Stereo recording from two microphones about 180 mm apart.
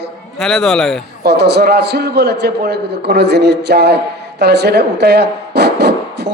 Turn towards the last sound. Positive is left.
turn(degrees=-65)  # may be behind; listen again after turning